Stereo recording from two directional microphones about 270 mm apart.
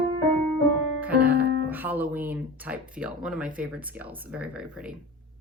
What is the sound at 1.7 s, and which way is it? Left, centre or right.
Speech, centre.